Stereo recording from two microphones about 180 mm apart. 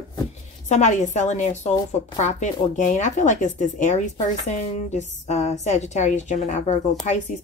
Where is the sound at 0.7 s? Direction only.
40° left (ahead or behind).